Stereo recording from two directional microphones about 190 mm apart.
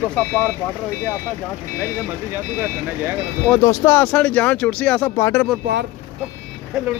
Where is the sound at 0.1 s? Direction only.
10° left (ahead or behind).